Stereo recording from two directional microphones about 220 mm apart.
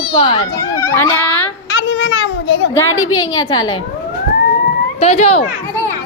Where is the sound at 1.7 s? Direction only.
55° left (ahead or behind).